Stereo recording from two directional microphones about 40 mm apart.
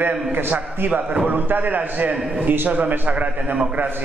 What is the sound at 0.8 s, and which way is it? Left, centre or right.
A man's voice, right.